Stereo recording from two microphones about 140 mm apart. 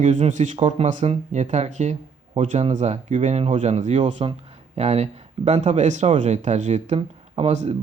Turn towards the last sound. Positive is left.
turn(degrees=-55)  # may be behind; listen again after turning